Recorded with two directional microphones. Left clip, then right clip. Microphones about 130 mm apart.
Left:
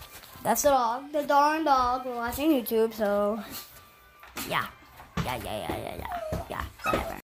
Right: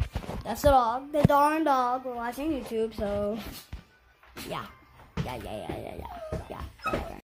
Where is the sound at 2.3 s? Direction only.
20° left (ahead or behind).